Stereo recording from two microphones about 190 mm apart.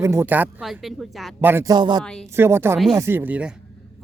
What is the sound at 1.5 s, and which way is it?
Speech, 15° right (ahead or behind).